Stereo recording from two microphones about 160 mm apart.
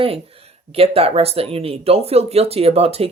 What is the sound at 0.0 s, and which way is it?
Speech, 35° right (ahead or behind).